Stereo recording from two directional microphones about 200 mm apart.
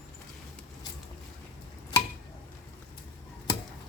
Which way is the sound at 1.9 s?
20° left (ahead or behind).